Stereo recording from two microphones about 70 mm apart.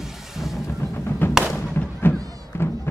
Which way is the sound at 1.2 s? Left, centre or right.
Left.